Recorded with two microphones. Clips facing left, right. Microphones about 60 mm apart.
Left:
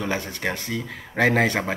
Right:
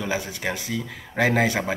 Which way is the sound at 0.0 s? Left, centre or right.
Centre.